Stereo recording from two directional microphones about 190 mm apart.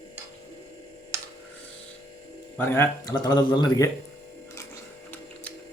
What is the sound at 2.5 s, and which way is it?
Speech, 10° left (ahead or behind).